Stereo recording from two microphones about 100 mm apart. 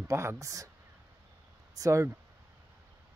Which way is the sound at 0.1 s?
30° right (ahead or behind).